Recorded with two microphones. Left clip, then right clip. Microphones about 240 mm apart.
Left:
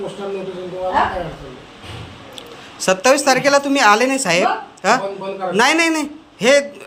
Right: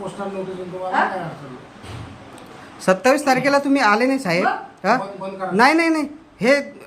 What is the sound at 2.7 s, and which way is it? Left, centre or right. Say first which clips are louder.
A man's voice: left 2 dB; centre.